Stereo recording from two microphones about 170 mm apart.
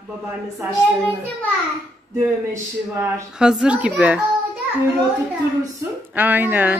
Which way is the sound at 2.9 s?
15° right (ahead or behind).